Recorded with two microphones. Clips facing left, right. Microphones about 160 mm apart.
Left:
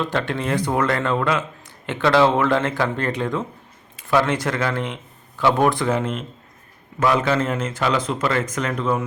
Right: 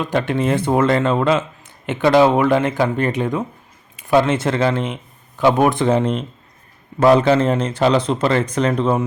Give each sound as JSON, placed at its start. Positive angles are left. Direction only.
{"t": 0.0, "sound": "speech", "side_deg": -15}